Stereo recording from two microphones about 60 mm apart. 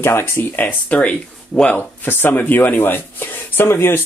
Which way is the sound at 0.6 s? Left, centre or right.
Left.